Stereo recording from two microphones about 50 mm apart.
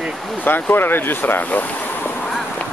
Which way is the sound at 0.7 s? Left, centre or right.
Left.